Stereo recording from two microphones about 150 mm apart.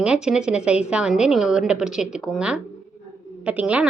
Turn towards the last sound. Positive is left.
turn(degrees=-10)  # may be behind; listen again after turning